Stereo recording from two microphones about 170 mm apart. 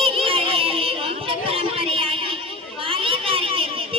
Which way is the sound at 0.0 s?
35° right (ahead or behind).